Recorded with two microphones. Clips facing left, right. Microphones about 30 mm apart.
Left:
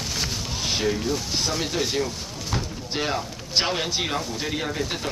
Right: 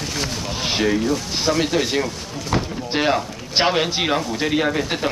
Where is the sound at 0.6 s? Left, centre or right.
Right.